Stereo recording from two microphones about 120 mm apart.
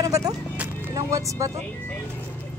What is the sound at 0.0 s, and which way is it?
Vehicle, 30° right (ahead or behind).